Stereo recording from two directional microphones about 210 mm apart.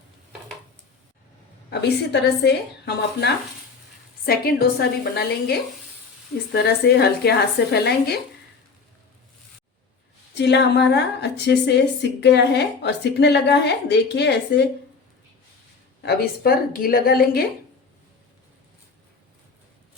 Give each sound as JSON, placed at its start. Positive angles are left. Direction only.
{"t": 2.4, "sound": "a woman's voice", "side_deg": 50}
{"t": 10.3, "sound": "a woman's voice", "side_deg": 55}
{"t": 16.0, "sound": "a woman's voice", "side_deg": 45}